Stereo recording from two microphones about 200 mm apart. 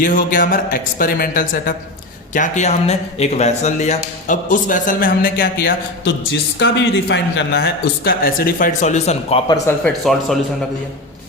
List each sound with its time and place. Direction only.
0.0 s speech: 40° left (ahead or behind)
6.6 s speech: 60° left (ahead or behind); by 9.4 s 35° left (ahead or behind)
9.8 s speech: centre (ahead or behind)